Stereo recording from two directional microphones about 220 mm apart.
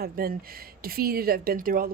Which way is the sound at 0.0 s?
40° right (ahead or behind).